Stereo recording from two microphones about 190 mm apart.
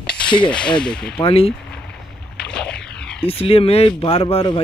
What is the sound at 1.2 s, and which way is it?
Speech, 30° left (ahead or behind).